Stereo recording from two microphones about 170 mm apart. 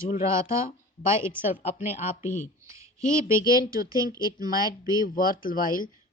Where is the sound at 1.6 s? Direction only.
45° left (ahead or behind).